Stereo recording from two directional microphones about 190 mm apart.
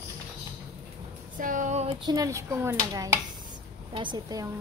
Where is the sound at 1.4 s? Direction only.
45° right (ahead or behind).